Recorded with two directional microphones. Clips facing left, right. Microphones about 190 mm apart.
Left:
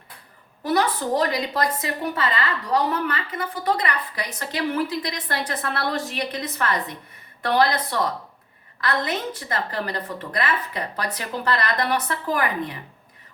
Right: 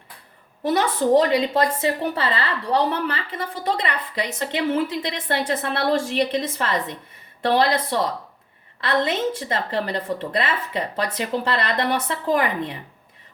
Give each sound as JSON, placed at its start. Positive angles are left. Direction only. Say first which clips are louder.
{"t": 0.6, "sound": "a woman's voice", "louder": "right 2 dB", "side_deg": -25}